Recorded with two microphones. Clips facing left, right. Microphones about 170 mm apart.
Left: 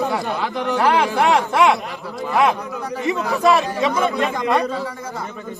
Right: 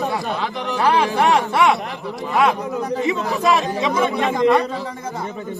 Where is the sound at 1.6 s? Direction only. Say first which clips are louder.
Left 2 dB; centre (ahead or behind).